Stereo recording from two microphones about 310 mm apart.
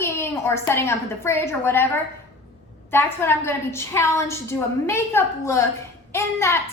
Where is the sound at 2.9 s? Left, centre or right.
Centre.